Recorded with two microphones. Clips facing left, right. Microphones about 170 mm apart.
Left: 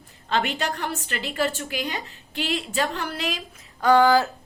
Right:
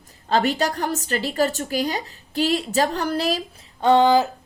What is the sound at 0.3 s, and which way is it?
A woman's voice, 40° right (ahead or behind).